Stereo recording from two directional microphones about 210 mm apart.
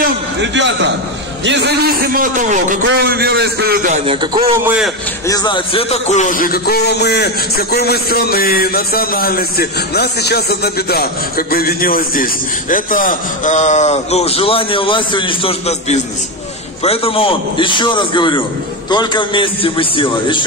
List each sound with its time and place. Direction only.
0.0 s a sound: 60° right (ahead or behind)
1.4 s a man's voice: 55° right (ahead or behind); by 2.8 s 35° right (ahead or behind)
2.8 s a man's voice: 55° right (ahead or behind)
3.9 s a man's voice: 25° right (ahead or behind)
4.6 s a man's voice: 5° right (ahead or behind)
5.3 s a man's voice: 20° left (ahead or behind)